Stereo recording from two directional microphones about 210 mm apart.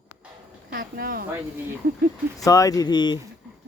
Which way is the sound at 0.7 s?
50° right (ahead or behind).